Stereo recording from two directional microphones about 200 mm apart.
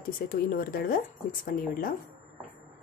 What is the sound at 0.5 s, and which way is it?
Speech, 45° left (ahead or behind).